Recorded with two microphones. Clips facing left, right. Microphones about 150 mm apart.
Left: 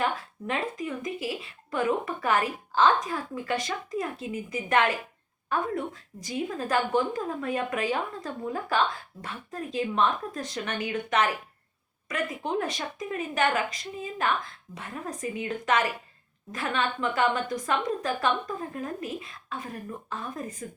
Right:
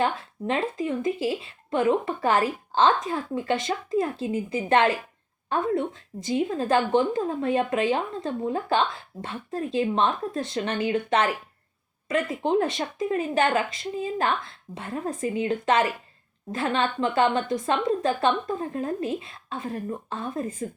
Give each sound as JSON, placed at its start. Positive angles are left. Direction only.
{"t": 0.0, "sound": "speech", "side_deg": -30}